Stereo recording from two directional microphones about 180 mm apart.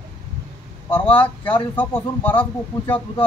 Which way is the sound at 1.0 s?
30° left (ahead or behind).